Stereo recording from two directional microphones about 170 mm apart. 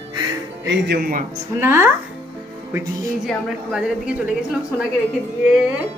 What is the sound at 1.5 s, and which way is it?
Speech, 15° right (ahead or behind).